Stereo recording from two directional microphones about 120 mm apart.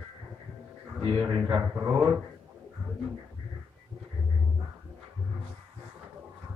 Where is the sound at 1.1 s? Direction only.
10° right (ahead or behind).